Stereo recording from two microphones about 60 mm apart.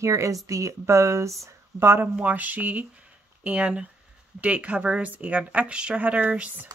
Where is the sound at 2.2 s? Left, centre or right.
Right.